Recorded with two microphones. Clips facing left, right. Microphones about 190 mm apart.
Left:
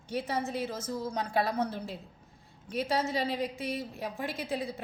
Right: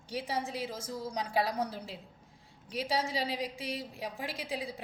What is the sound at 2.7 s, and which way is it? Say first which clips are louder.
A woman's voice: left 3 dB; 55° left (ahead or behind).